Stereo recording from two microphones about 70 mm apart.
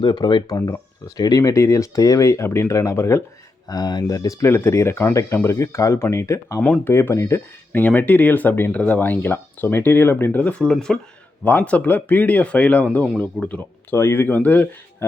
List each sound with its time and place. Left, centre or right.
0.1 s speech: left
0.7 s speech: left
3.7 s speech: left
4.0 s speech: left
4.4 s speech: left
7.1 s speech: left
7.7 s speech: left
10.7 s speech: centre
11.6 s speech: left
13.9 s speech: left
14.3 s speech: left